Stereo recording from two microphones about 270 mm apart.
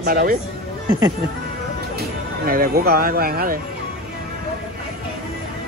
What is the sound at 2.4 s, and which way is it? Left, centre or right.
Speech, right.